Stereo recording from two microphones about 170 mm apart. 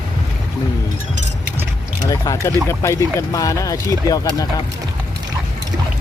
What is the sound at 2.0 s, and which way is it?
Speech, 20° left (ahead or behind).